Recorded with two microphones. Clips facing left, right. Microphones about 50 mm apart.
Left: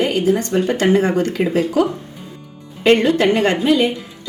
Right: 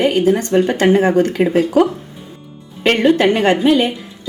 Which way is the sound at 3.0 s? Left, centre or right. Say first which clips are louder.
Right 2 dB; right.